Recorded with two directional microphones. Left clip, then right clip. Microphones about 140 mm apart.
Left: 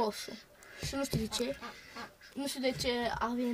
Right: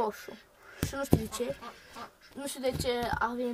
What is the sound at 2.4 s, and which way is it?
Speech, 20° left (ahead or behind).